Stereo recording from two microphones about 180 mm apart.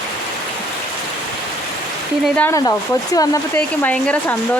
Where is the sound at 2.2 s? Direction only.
10° left (ahead or behind).